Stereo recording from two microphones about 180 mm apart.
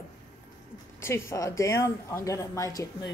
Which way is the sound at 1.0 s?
15° left (ahead or behind).